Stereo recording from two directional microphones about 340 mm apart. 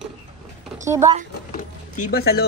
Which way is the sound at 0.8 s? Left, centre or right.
Centre.